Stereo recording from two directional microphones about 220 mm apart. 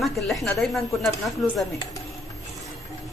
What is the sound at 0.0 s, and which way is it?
Speech, centre (ahead or behind).